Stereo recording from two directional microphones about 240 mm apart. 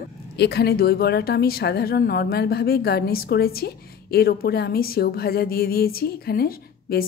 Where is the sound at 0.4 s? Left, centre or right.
Left.